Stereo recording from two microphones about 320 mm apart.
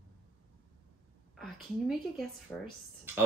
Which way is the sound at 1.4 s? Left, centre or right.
Centre.